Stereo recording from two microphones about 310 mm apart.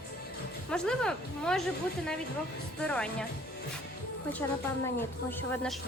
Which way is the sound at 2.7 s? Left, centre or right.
Centre.